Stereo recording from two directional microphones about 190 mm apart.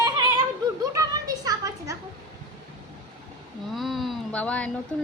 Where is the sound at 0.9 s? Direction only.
20° right (ahead or behind).